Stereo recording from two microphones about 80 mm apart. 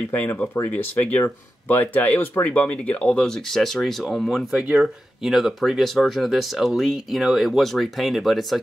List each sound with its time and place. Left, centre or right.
0.1 s speech: centre
4.6 s speech: centre
5.2 s speech: centre